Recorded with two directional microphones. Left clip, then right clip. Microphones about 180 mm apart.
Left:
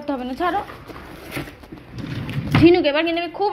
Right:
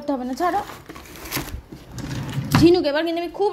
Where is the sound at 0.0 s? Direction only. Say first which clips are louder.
Even; 30° right (ahead or behind).